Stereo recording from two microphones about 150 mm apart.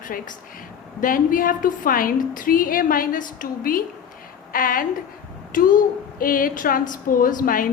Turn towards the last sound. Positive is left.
turn(degrees=65)  # may be behind; listen again after turning